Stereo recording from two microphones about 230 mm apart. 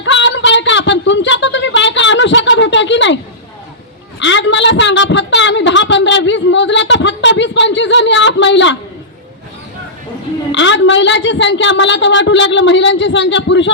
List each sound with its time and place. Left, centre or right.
0.0 s a sound: left
4.2 s a woman's voice: left
10.5 s a woman's voice: left